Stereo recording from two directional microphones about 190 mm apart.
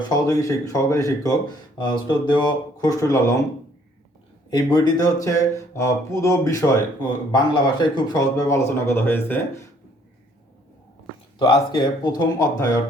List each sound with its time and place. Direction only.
0.1 s speech: 20° left (ahead or behind)
4.5 s speech: 20° left (ahead or behind)
11.3 s speech: 25° left (ahead or behind)